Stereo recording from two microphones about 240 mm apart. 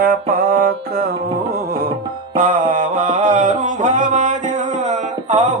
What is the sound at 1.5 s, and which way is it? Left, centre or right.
Tabla, right.